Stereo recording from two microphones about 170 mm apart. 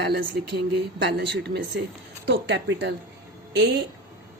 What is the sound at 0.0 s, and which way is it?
Speech, 70° right (ahead or behind).